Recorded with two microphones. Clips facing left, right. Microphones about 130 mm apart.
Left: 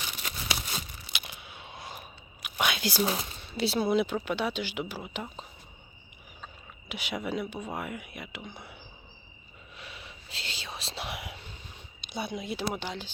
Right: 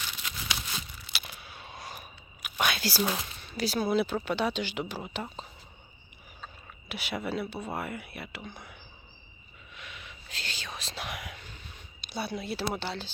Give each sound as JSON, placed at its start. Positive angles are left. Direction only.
{"t": 0.2, "sound": "tearing", "side_deg": 35}
{"t": 1.1, "sound": "whispering", "side_deg": 20}
{"t": 3.2, "sound": "speech", "side_deg": 25}
{"t": 6.4, "sound": "a sound", "side_deg": 15}
{"t": 7.8, "sound": "speech", "side_deg": 15}
{"t": 9.7, "sound": "whispering", "side_deg": 35}
{"t": 11.9, "sound": "speech", "side_deg": 20}